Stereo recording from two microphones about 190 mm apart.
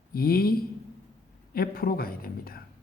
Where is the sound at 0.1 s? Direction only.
50° left (ahead or behind).